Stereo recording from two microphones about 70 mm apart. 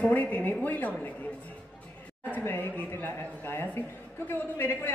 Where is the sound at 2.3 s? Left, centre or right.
Left.